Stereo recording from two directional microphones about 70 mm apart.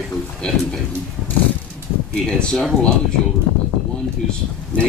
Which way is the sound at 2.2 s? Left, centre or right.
Centre.